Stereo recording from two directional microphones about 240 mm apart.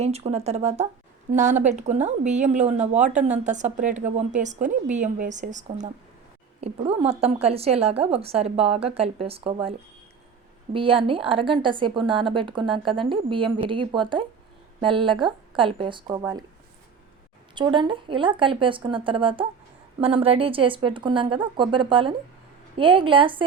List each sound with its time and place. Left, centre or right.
0.0 s a woman's voice: right
10.8 s a woman's voice: right
17.5 s a woman's voice: centre